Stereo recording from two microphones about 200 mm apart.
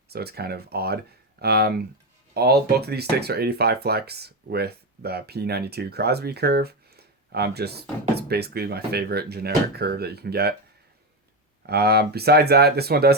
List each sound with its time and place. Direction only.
0.1 s speech: 50° right (ahead or behind)
11.6 s speech: 50° right (ahead or behind)